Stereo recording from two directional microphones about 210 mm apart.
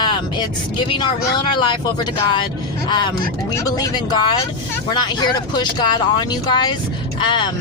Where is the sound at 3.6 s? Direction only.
15° left (ahead or behind).